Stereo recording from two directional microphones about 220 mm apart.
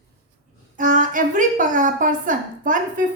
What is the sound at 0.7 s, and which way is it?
A woman's voice, 35° right (ahead or behind).